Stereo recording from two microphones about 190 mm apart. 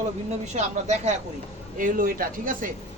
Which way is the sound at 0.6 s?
35° right (ahead or behind).